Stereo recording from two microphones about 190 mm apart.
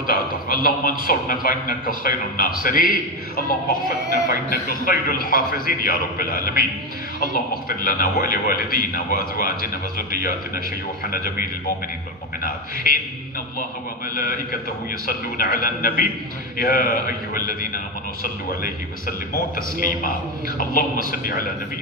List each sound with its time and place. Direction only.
0.0 s a man's voice: 50° left (ahead or behind)
4.3 s a man's voice: 50° left (ahead or behind)
11.1 s a man's voice: 50° left (ahead or behind)
12.4 s a man's voice: 50° left (ahead or behind)
14.1 s a man's voice: 50° left (ahead or behind)